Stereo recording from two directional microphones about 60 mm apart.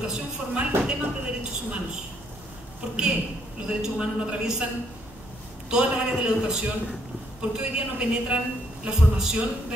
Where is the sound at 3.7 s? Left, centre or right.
Centre.